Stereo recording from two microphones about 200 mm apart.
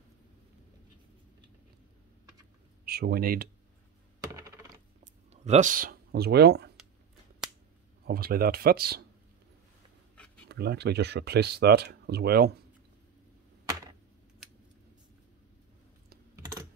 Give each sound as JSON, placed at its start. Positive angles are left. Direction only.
{"t": 2.8, "sound": "speech", "side_deg": -50}
{"t": 4.3, "sound": "coin", "side_deg": -15}
{"t": 5.0, "sound": "a sound", "side_deg": -35}
{"t": 8.0, "sound": "speech", "side_deg": -50}
{"t": 10.1, "sound": "a sound", "side_deg": 5}
{"t": 10.5, "sound": "speech", "side_deg": -55}